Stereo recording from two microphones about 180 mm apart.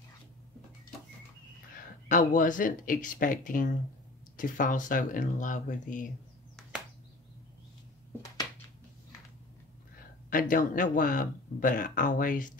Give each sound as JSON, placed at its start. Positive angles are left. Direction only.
{"t": 2.0, "sound": "a man's voice", "side_deg": 50}
{"t": 10.3, "sound": "a man's voice", "side_deg": 50}